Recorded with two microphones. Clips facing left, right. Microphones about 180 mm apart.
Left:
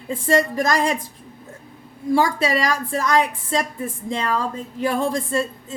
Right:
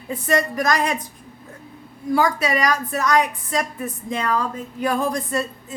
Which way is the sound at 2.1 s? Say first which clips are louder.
Left 1 dB; 30° left (ahead or behind).